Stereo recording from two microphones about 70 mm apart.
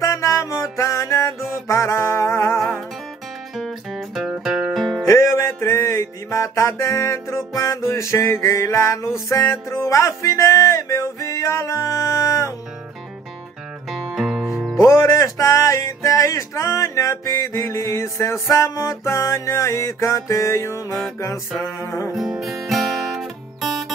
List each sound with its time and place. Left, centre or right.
0.0 s music: left
3.9 s music: centre
4.4 s music: centre
5.0 s music: left
14.1 s music: centre
14.8 s music: left
22.1 s guitar: centre